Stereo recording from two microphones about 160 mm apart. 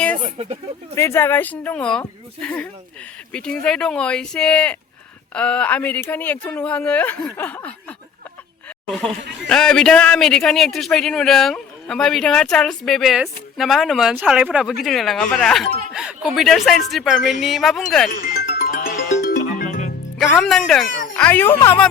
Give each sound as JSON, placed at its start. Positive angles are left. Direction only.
{"t": 0.4, "sound": "speech", "side_deg": -40}
{"t": 0.9, "sound": "a man's voice", "side_deg": 15}
{"t": 9.5, "sound": "a man's voice", "side_deg": 5}
{"t": 18.1, "sound": "music", "side_deg": 60}
{"t": 20.1, "sound": "a man's voice", "side_deg": 5}